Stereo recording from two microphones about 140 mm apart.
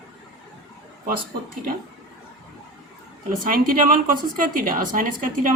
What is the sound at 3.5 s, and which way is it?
A woman's voice, 85° right.